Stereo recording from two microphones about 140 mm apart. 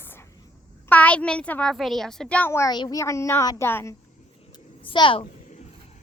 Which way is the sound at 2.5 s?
20° left (ahead or behind).